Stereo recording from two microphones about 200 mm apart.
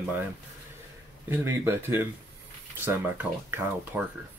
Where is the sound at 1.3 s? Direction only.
10° right (ahead or behind).